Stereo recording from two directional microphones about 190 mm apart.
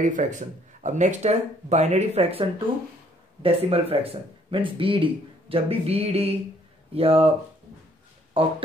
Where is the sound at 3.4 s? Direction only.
30° right (ahead or behind).